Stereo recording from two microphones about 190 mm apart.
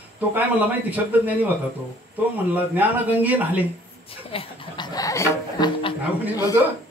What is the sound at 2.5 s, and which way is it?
A man's voice, 10° right (ahead or behind).